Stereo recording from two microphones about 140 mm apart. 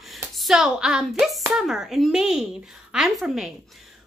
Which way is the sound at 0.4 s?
5° right (ahead or behind).